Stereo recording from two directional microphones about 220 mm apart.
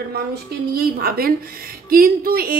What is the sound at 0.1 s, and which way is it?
A woman's voice, 45° right (ahead or behind).